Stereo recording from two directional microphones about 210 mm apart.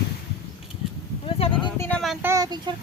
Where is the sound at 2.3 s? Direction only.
15° right (ahead or behind).